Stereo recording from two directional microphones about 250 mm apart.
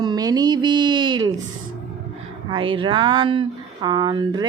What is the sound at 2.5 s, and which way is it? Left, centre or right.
A woman's voice, right.